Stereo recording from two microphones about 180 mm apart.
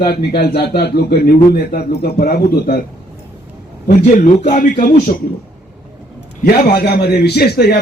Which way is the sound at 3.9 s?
60° left (ahead or behind).